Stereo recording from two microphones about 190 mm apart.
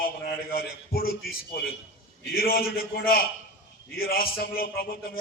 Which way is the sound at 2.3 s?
50° left (ahead or behind).